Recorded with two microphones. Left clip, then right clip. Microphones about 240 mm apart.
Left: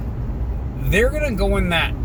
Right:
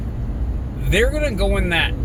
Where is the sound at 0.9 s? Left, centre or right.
Centre.